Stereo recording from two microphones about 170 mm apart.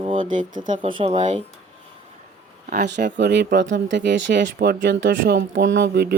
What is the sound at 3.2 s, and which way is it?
Speech, 90° right.